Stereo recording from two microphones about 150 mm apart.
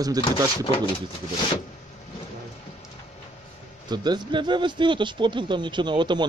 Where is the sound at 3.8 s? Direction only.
30° right (ahead or behind).